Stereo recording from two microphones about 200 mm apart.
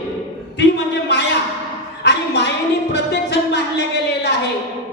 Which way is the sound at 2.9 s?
60° left (ahead or behind).